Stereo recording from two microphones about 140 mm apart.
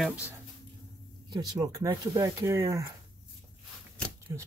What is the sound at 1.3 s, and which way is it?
Speech, 30° right (ahead or behind).